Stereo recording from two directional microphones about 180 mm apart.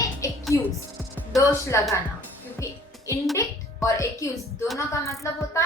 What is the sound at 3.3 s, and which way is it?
Music, 15° left (ahead or behind).